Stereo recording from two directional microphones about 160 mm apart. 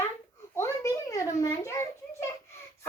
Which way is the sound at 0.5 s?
20° left (ahead or behind).